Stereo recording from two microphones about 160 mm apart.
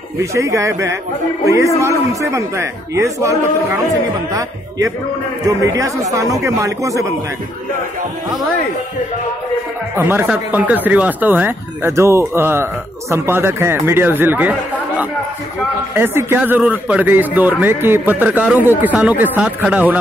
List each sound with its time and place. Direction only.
0.2 s a man's voice: 20° right (ahead or behind)
9.9 s a man's voice: 15° right (ahead or behind)
15.9 s a man's voice: 15° right (ahead or behind)